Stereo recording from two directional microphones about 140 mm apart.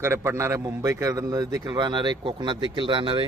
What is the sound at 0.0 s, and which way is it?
A man's voice, 20° right (ahead or behind).